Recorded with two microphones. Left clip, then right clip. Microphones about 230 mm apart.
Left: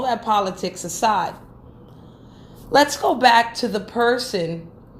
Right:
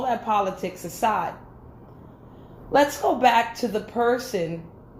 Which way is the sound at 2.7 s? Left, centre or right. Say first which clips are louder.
Left 3 dB; left.